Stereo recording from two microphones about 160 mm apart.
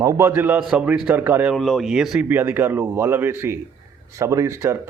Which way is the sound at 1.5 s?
Centre (ahead or behind).